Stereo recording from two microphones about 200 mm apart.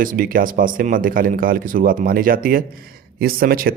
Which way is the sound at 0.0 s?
45° right (ahead or behind).